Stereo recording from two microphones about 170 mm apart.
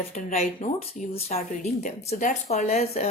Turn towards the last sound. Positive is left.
turn(degrees=40)  # may be behind; listen again after turning